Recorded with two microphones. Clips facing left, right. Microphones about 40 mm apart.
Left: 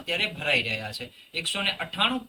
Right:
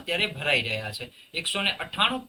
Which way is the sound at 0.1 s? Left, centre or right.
Centre.